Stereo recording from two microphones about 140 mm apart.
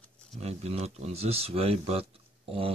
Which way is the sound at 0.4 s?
50° right (ahead or behind).